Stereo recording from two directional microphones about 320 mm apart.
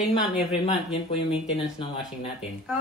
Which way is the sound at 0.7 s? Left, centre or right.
Centre.